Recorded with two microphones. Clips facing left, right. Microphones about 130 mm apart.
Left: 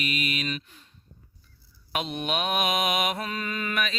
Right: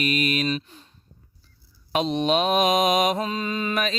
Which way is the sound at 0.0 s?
45° right (ahead or behind).